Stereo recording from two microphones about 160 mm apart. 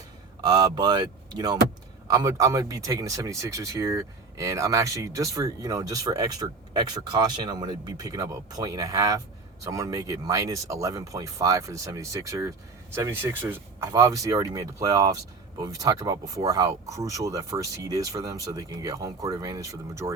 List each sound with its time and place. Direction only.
0.4 s speech: 25° right (ahead or behind)